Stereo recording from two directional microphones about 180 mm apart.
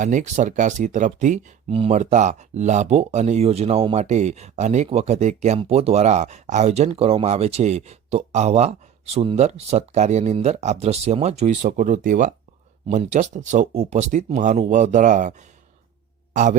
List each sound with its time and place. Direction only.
0.0 s speech: 45° right (ahead or behind)
16.3 s music: 45° right (ahead or behind)